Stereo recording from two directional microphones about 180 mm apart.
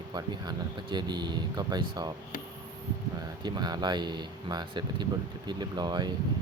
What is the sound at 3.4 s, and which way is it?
Speech, 25° right (ahead or behind).